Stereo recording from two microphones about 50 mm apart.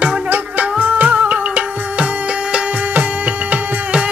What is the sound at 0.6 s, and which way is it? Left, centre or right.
Music, right.